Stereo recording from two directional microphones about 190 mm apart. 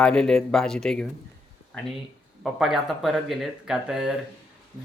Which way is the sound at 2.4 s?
Centre (ahead or behind).